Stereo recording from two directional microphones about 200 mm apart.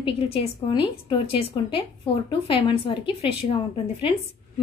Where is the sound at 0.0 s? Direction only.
25° left (ahead or behind).